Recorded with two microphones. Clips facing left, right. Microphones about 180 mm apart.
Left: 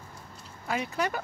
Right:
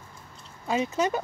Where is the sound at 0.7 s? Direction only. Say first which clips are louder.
Right 5 dB; 20° right (ahead or behind).